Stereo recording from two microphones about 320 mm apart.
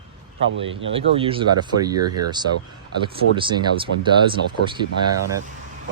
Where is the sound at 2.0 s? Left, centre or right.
Right.